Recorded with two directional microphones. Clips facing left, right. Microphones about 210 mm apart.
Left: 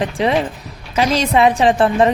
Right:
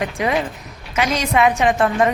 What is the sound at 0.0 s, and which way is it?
A woman's voice, 30° left (ahead or behind).